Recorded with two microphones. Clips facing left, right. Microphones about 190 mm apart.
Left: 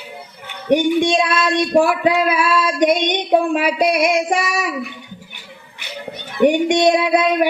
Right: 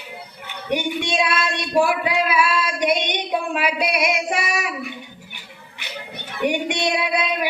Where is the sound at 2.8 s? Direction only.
45° left (ahead or behind).